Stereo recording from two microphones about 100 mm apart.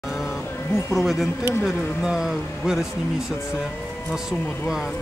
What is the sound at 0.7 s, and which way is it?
Speech, 25° left (ahead or behind).